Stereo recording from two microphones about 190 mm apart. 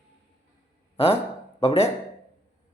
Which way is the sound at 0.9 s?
30° left (ahead or behind).